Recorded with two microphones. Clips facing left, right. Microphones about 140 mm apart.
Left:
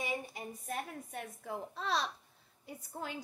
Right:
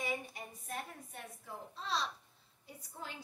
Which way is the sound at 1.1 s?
70° left (ahead or behind).